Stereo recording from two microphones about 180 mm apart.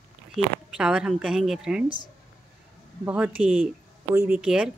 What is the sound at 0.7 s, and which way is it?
Speech, 5° right (ahead or behind).